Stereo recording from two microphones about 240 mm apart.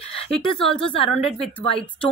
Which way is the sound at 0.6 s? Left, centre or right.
Centre.